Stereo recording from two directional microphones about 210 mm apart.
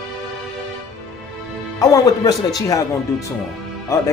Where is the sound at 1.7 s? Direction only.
15° left (ahead or behind).